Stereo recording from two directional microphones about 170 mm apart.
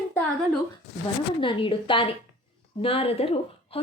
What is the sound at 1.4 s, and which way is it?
A child's voice, 30° left (ahead or behind).